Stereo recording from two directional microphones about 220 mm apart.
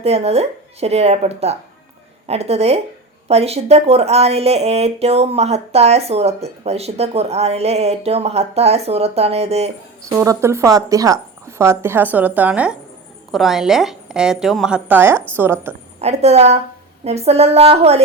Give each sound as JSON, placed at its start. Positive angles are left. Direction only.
{"t": 0.0, "sound": "speech", "side_deg": -30}
{"t": 10.1, "sound": "a woman's voice", "side_deg": -15}
{"t": 16.0, "sound": "speech", "side_deg": -30}